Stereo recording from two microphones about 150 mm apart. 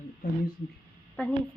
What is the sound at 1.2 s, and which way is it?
Speech, 10° left (ahead or behind).